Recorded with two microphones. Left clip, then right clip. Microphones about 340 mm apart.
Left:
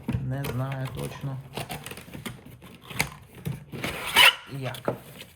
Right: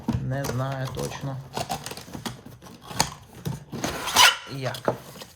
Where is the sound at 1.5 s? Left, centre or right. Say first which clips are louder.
Right 6 dB; centre.